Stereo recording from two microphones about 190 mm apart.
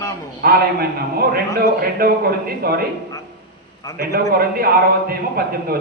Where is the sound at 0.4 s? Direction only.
55° right (ahead or behind).